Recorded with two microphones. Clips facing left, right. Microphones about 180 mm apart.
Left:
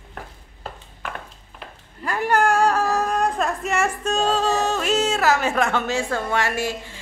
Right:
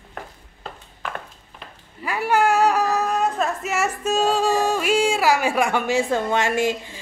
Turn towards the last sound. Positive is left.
turn(degrees=-15)  # may be behind; listen again after turning